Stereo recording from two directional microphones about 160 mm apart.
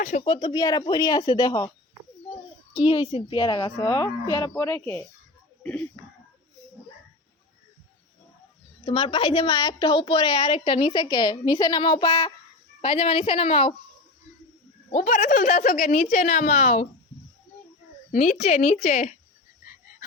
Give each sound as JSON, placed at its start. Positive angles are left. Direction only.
{"t": 0.2, "sound": "speech", "side_deg": 30}
{"t": 2.7, "sound": "speech", "side_deg": 30}
{"t": 8.8, "sound": "a woman's voice", "side_deg": 35}
{"t": 12.8, "sound": "a woman's voice", "side_deg": 35}
{"t": 14.8, "sound": "a woman's voice", "side_deg": 50}
{"t": 18.1, "sound": "a woman's voice", "side_deg": 50}